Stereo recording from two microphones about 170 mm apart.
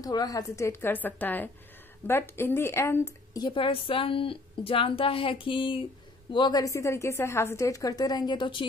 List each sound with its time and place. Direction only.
0.0 s a woman's voice: 20° left (ahead or behind)